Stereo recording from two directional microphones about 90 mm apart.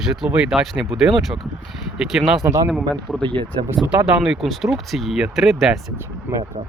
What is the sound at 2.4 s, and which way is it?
Speech, 35° right (ahead or behind).